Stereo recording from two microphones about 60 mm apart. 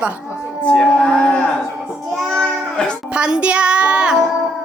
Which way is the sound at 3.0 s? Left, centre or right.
Centre.